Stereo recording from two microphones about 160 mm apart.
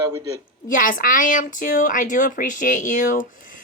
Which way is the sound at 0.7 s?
60° left (ahead or behind).